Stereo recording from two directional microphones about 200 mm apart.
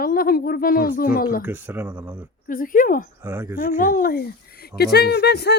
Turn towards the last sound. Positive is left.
turn(degrees=55)  # may be behind; listen again after turning